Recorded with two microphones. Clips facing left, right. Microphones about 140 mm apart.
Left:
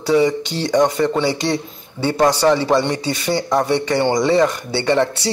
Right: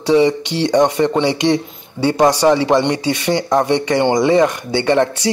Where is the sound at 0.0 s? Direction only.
20° right (ahead or behind).